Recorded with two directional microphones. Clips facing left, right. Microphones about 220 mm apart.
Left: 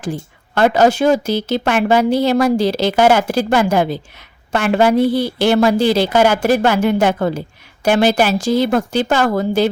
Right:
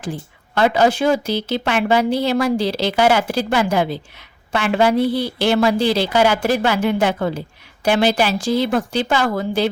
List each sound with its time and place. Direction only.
0.0 s speech: 45° left (ahead or behind)